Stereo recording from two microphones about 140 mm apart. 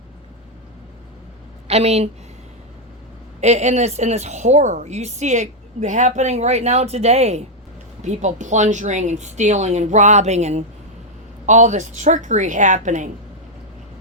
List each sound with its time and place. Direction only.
1.6 s a woman's voice: 50° right (ahead or behind)
3.4 s a woman's voice: 55° right (ahead or behind)